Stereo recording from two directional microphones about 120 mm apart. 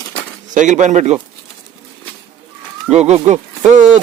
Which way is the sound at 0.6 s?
90° right.